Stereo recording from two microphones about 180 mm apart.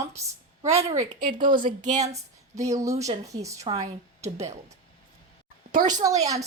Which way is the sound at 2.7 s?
20° right (ahead or behind).